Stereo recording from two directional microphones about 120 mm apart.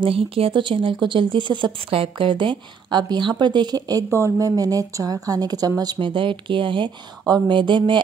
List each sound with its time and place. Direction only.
0.0 s speech: 50° right (ahead or behind)